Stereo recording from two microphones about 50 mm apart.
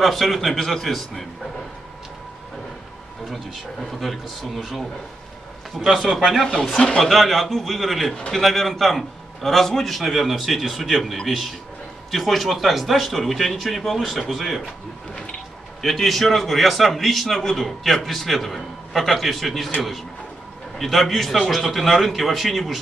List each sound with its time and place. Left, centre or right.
0.0 s a man's voice: centre
3.3 s a man's voice: centre
20.7 s a man's voice: centre